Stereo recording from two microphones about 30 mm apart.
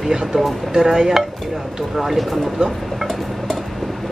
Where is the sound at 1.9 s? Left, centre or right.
Centre.